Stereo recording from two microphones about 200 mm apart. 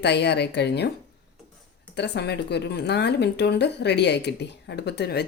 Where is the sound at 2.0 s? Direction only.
55° left (ahead or behind).